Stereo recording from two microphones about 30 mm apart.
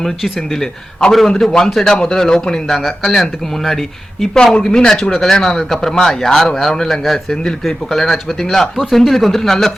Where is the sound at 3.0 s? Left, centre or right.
Centre.